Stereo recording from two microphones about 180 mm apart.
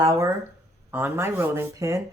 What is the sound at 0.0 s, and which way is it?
Speech, 15° right (ahead or behind).